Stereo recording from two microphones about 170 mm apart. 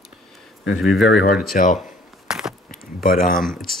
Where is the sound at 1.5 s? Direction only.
50° left (ahead or behind).